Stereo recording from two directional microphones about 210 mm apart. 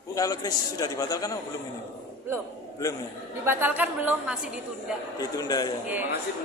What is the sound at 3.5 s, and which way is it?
A woman's voice, 10° right (ahead or behind).